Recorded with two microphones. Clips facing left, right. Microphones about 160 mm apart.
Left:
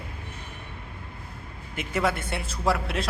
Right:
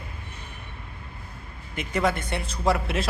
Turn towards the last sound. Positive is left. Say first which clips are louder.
# right 2 dB
turn(degrees=0)  # may be behind; listen again after turning